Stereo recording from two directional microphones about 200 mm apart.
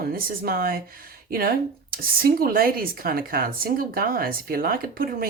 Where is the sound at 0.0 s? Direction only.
50° right (ahead or behind).